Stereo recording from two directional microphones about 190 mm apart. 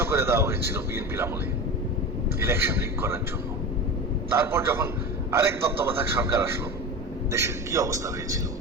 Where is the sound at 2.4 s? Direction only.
10° right (ahead or behind).